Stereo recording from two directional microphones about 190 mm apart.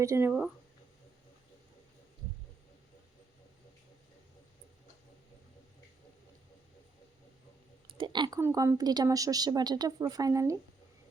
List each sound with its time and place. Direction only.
0.0 s speech: 15° right (ahead or behind)
7.9 s a sound: 25° right (ahead or behind)
8.4 s speech: 15° right (ahead or behind)